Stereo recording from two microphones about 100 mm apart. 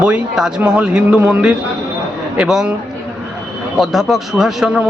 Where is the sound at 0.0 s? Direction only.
10° right (ahead or behind).